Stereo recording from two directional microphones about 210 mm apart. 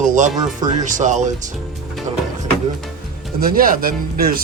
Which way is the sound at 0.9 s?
35° right (ahead or behind).